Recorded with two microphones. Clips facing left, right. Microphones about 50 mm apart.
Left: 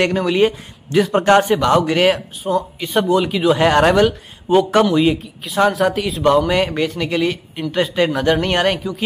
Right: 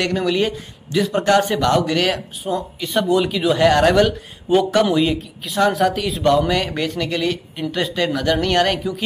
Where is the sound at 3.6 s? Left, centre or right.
Left.